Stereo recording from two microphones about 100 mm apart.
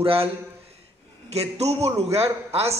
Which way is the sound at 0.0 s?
75° right (ahead or behind).